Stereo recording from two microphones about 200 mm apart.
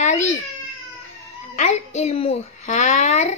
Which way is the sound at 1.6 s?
35° left (ahead or behind).